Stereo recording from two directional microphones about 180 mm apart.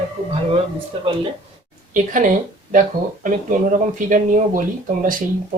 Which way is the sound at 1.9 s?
45° right (ahead or behind).